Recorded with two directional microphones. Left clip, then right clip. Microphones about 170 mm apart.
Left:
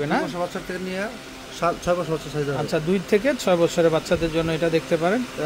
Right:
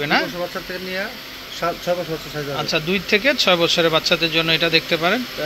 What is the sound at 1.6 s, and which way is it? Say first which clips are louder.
Speech: even; 65° left (ahead or behind).